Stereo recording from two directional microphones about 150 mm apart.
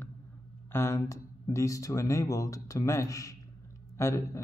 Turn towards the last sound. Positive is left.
turn(degrees=20)  # may be behind; listen again after turning